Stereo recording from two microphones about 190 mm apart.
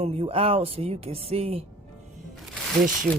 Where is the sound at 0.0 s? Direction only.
30° right (ahead or behind).